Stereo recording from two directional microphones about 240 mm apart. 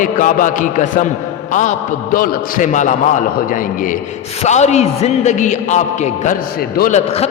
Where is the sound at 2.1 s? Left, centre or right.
Left.